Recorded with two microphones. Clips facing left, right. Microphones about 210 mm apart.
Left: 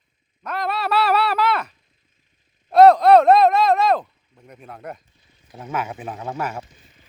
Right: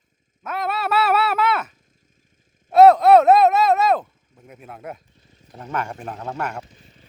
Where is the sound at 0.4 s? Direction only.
5° right (ahead or behind).